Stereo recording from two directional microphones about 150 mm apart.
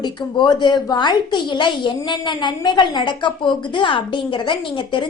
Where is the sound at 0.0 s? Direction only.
30° left (ahead or behind).